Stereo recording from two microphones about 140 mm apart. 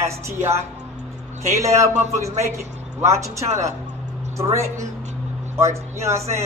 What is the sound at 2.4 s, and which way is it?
Speech, 20° right (ahead or behind).